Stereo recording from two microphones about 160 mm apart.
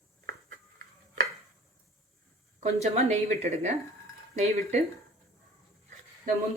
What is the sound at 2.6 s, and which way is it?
A woman's voice, 45° right (ahead or behind).